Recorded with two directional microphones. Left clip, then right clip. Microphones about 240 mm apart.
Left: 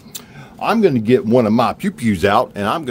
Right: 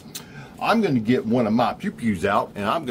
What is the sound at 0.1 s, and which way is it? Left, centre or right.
Speech, left.